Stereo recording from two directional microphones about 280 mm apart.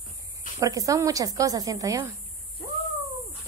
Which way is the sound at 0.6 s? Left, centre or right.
Centre.